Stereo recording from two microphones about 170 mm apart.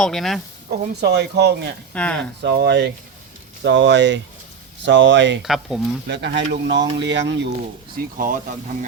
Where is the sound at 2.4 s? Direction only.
80° right.